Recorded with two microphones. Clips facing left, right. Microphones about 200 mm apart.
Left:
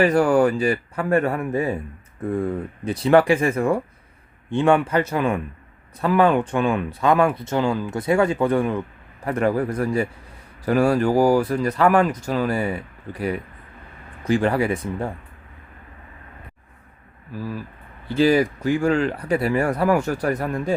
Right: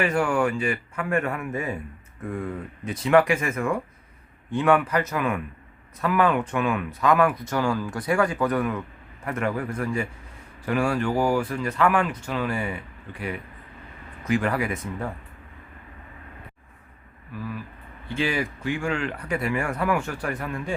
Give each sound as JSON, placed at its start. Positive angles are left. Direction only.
{"t": 0.0, "sound": "speech", "side_deg": 35}
{"t": 17.3, "sound": "speech", "side_deg": 35}